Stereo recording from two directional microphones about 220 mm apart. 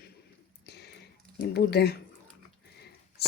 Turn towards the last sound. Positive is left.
turn(degrees=45)  # may be behind; listen again after turning